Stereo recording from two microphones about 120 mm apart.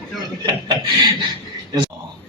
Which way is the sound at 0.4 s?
35° right (ahead or behind).